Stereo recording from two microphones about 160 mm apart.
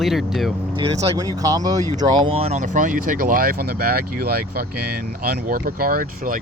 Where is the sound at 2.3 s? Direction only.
40° right (ahead or behind).